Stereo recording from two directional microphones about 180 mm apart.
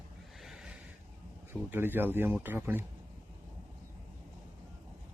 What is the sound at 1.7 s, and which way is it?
Speech, 10° right (ahead or behind).